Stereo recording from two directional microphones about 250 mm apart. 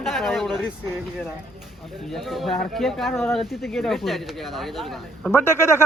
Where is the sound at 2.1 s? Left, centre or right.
Centre.